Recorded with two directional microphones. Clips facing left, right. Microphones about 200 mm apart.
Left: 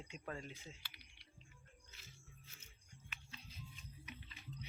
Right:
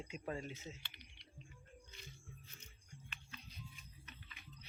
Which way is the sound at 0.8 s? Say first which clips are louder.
Right 2 dB; 5° left (ahead or behind).